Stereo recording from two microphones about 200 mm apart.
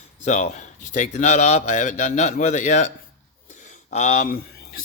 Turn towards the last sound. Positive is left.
turn(degrees=50)  # may be behind; listen again after turning